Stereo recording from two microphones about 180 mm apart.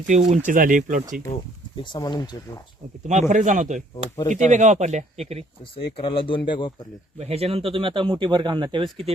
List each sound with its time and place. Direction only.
0.1 s speech: 40° right (ahead or behind)
1.7 s speech: 25° left (ahead or behind)
3.1 s speech: 45° right (ahead or behind)
5.7 s speech: 30° left (ahead or behind)
7.2 s speech: 35° right (ahead or behind)